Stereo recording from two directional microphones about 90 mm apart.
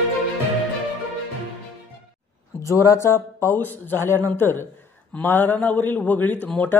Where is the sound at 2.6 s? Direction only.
35° left (ahead or behind).